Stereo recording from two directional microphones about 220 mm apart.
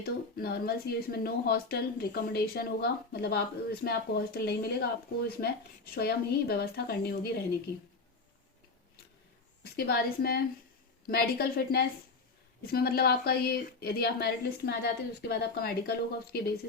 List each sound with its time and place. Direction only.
0.0 s speech: 45° left (ahead or behind)
5.9 s speech: 45° left (ahead or behind)
9.7 s speech: 45° left (ahead or behind)